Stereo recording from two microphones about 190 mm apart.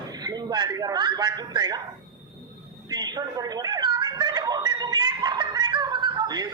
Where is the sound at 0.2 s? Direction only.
20° right (ahead or behind).